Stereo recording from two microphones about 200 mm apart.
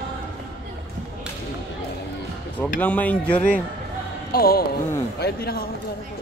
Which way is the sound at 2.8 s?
5° left (ahead or behind).